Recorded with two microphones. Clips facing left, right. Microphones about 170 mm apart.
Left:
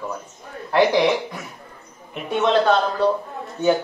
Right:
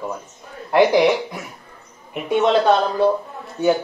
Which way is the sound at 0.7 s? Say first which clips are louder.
Right 3 dB; 15° right (ahead or behind).